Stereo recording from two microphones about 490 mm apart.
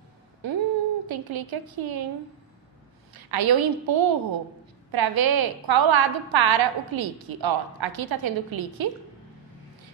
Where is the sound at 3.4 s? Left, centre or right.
Right.